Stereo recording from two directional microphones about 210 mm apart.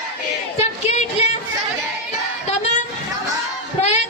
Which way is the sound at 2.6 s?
35° left (ahead or behind).